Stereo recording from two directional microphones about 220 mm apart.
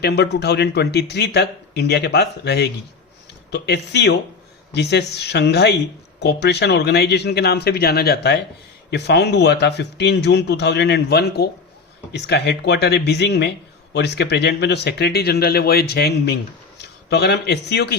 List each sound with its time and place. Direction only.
0.0 s speech: 50° left (ahead or behind)